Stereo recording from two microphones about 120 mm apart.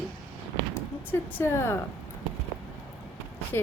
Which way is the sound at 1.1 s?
20° left (ahead or behind).